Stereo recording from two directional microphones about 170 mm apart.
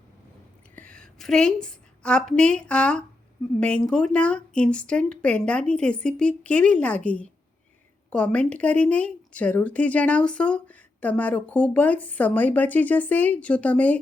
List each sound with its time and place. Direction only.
0.9 s a woman's voice: 5° left (ahead or behind)